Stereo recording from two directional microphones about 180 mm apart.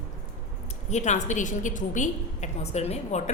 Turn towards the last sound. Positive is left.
turn(degrees=35)  # may be behind; listen again after turning